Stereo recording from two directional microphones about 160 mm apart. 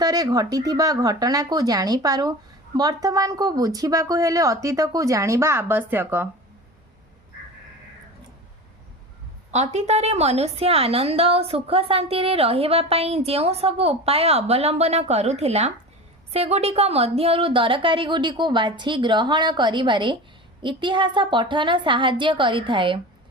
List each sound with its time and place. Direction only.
0.0 s a woman's voice: 25° right (ahead or behind)
9.5 s a woman's voice: 45° right (ahead or behind)